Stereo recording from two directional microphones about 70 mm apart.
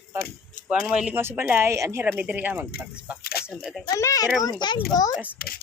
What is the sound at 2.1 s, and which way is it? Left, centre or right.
Speech, right.